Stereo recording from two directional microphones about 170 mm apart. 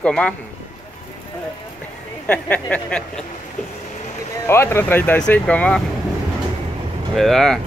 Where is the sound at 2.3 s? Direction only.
10° left (ahead or behind).